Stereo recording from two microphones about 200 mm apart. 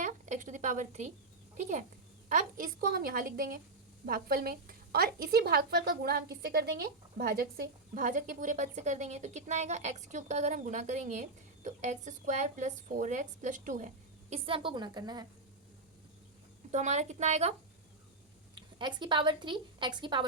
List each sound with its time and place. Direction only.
0.0 s a sound: 40° right (ahead or behind)
2.3 s a woman's voice: 45° right (ahead or behind); by 15.3 s 20° right (ahead or behind)
16.7 s a woman's voice: 35° right (ahead or behind)
18.8 s speech: 25° right (ahead or behind)